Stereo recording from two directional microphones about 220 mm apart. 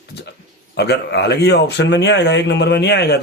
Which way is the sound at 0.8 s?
50° left (ahead or behind).